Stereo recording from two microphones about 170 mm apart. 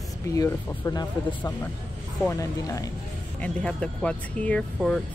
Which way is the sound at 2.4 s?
20° left (ahead or behind).